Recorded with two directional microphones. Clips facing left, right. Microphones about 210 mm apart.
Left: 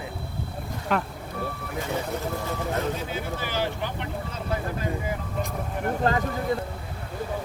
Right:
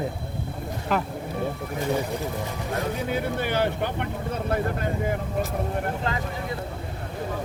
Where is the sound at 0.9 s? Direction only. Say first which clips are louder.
Right 1 dB; centre (ahead or behind).